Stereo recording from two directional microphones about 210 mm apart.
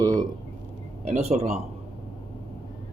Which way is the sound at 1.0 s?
30° right (ahead or behind).